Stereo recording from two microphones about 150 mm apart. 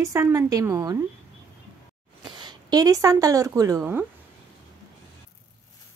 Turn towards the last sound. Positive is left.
turn(degrees=-15)  # may be behind; listen again after turning